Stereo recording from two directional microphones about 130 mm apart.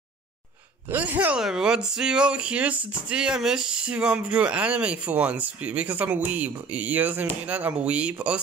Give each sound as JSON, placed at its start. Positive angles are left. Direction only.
{"t": 0.8, "sound": "speech", "side_deg": -15}